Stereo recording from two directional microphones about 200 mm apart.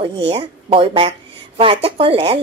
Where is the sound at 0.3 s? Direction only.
25° right (ahead or behind).